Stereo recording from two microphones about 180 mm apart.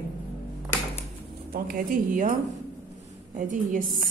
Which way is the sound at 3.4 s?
45° right (ahead or behind).